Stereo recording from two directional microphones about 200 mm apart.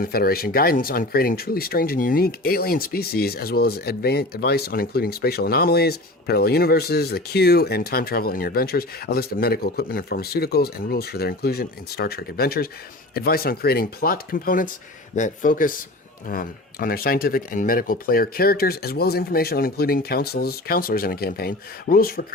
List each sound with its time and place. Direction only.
0.0 s speech: 50° left (ahead or behind)